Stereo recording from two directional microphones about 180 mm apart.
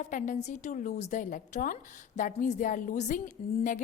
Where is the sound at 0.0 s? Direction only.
45° left (ahead or behind).